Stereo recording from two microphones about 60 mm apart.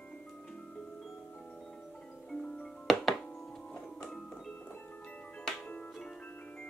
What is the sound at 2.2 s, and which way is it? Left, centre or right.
Music, centre.